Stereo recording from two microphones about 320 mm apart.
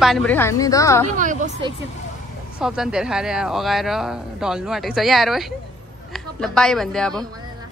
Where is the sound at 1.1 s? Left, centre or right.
Right.